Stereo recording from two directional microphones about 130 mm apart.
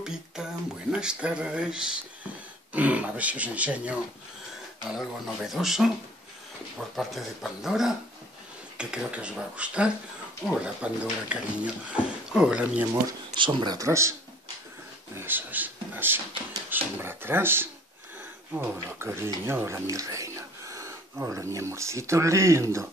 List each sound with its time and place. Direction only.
0.0 s music: 5° right (ahead or behind)
0.9 s speech: 5° right (ahead or behind)
7.0 s speech: centre (ahead or behind)
13.3 s speech: 40° right (ahead or behind)
13.7 s speech: 20° right (ahead or behind)
15.1 s speech: 15° right (ahead or behind)